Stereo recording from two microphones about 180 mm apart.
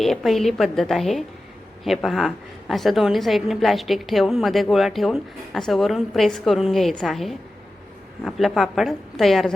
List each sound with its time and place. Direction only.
0.0 s a woman's voice: centre (ahead or behind)